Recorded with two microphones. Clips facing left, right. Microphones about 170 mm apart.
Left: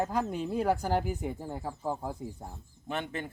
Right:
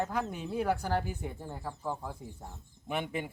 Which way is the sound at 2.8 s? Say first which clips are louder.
Right 1 dB; 10° right (ahead or behind).